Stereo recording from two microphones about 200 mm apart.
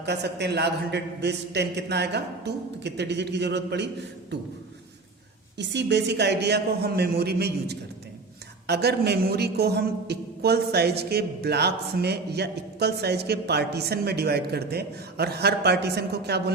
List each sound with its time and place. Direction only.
0.0 s a man's voice: 55° right (ahead or behind)
5.5 s a man's voice: 60° right (ahead or behind)